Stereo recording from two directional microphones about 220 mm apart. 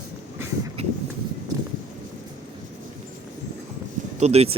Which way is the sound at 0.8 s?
30° right (ahead or behind).